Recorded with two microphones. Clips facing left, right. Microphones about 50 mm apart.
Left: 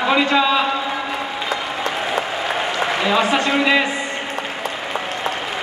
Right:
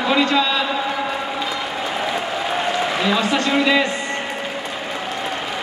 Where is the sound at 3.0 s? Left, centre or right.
Centre.